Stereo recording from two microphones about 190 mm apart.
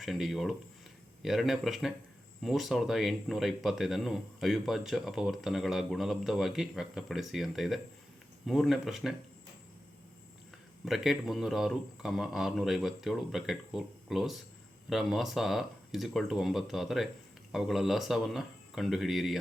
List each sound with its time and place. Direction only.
0.0 s speech: centre (ahead or behind)
10.8 s speech: centre (ahead or behind)